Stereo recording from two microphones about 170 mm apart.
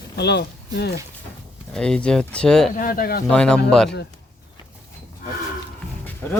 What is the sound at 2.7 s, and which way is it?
Speech, 60° left (ahead or behind).